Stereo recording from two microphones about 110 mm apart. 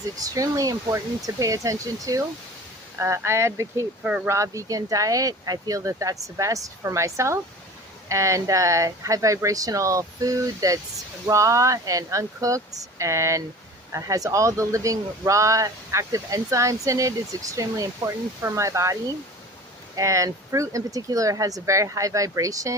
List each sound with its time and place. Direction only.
0.2 s speech: 30° right (ahead or behind)